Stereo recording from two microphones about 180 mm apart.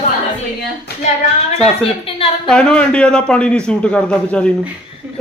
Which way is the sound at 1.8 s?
30° left (ahead or behind).